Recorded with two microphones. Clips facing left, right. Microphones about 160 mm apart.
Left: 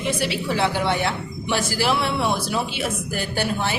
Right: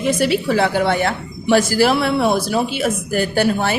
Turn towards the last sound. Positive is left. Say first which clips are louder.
# right 7 dB
turn(degrees=-50)  # may be behind; listen again after turning